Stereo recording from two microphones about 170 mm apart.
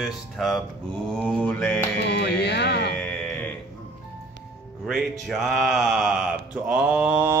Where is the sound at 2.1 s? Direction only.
80° left.